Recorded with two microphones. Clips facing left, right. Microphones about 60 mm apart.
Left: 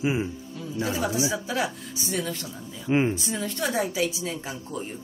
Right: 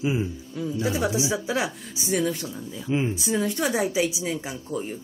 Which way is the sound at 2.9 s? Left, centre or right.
Left.